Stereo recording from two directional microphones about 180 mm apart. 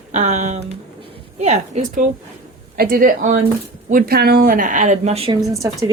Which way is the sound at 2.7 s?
55° right (ahead or behind).